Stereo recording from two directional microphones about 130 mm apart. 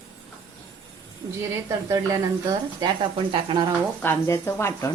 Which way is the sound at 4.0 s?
20° left (ahead or behind).